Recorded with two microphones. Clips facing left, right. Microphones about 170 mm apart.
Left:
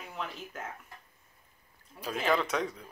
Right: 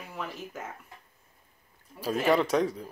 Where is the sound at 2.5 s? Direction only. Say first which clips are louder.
Right 6 dB; 35° right (ahead or behind).